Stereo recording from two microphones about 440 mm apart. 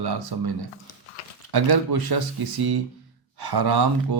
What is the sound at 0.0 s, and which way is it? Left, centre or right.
A man's voice, right.